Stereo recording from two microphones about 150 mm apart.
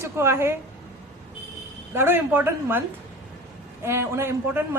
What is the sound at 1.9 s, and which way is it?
Speech, 15° right (ahead or behind).